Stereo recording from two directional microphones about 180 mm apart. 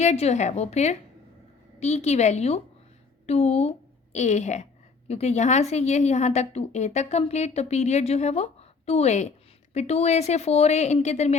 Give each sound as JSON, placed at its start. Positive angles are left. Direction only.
{"t": 0.0, "sound": "a woman's voice", "side_deg": 40}